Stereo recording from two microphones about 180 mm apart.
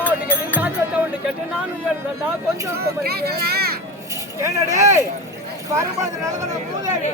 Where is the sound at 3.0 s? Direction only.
60° right (ahead or behind).